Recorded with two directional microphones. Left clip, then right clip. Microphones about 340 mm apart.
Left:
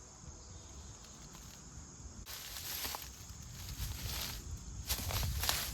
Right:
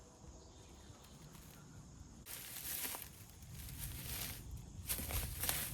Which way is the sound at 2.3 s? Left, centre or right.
Centre.